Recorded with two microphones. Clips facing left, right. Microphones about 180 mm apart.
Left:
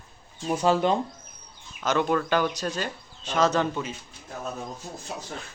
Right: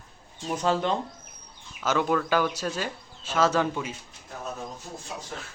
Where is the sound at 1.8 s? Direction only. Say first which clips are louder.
Left 1 dB; 5° right (ahead or behind).